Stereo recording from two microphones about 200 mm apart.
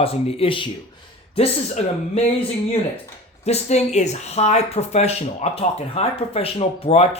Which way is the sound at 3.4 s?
35° left (ahead or behind).